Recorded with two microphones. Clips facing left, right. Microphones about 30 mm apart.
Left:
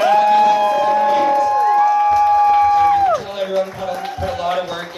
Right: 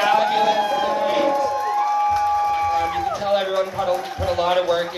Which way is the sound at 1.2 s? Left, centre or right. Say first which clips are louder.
Left 6 dB; centre.